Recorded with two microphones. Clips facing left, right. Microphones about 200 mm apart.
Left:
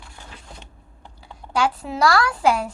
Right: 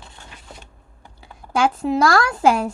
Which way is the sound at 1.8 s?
40° right (ahead or behind).